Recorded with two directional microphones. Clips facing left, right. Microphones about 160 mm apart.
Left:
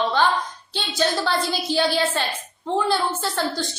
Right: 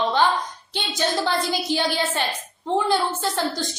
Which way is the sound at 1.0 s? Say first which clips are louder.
Left 1 dB; 15° right (ahead or behind).